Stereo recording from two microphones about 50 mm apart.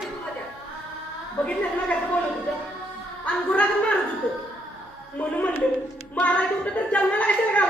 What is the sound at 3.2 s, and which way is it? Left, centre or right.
Speech, left.